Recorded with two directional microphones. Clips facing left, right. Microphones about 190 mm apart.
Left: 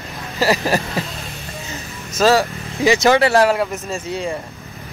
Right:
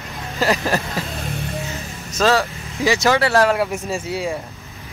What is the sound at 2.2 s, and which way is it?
Speech, 10° left (ahead or behind).